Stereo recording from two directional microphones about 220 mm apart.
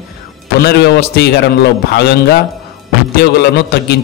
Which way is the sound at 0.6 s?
50° left (ahead or behind).